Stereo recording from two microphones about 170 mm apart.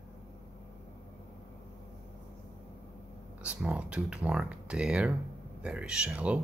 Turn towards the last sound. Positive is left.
turn(degrees=-10)  # may be behind; listen again after turning